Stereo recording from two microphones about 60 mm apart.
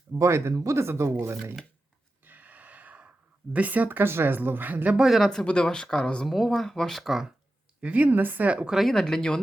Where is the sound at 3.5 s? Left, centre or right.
Right.